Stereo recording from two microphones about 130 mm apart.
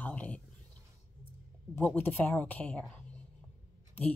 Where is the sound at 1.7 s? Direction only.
15° left (ahead or behind).